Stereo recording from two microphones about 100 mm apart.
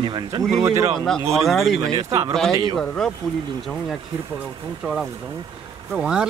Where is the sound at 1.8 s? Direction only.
35° right (ahead or behind).